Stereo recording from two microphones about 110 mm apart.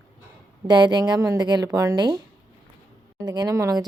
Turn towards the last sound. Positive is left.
turn(degrees=-30)  # may be behind; listen again after turning